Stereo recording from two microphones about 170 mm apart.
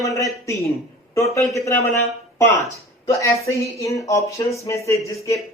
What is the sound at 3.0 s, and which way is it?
A man's voice, 15° left (ahead or behind).